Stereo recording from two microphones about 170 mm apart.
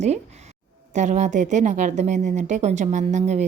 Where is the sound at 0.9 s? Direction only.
45° right (ahead or behind).